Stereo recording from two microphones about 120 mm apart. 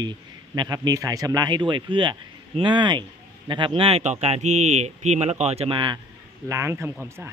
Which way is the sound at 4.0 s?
70° right (ahead or behind).